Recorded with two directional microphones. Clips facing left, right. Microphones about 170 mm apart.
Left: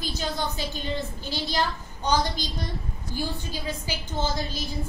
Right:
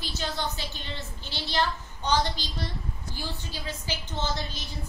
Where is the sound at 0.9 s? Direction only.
45° left (ahead or behind).